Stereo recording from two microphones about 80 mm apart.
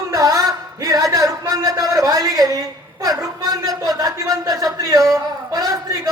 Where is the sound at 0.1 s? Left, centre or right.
Right.